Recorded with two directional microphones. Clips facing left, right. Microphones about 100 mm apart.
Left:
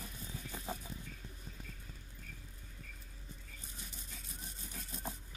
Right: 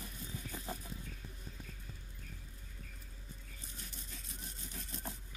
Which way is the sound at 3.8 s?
5° left (ahead or behind).